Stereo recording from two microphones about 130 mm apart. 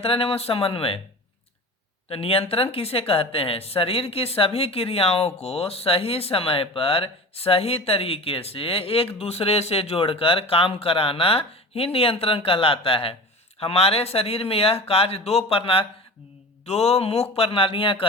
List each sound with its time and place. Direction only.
0.0 s speech: 45° left (ahead or behind)
2.0 s speech: 45° left (ahead or behind)